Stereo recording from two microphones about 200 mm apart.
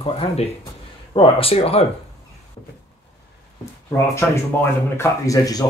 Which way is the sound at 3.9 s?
15° left (ahead or behind).